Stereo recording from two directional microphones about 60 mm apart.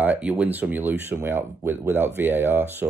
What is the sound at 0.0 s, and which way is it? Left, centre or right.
Speech, right.